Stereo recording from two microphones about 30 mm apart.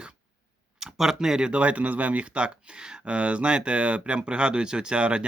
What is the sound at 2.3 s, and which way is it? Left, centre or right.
Speech, right.